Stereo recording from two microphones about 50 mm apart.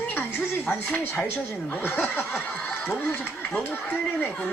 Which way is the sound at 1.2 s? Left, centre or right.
Left.